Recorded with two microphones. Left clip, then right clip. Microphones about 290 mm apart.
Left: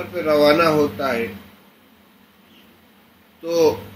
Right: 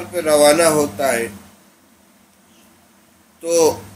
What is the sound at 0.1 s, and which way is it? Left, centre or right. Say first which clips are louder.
Speech: right 3 dB; right.